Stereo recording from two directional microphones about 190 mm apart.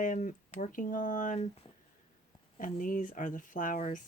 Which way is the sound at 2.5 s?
45° left (ahead or behind).